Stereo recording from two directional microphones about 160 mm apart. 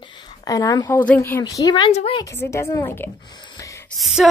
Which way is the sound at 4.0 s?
Centre (ahead or behind).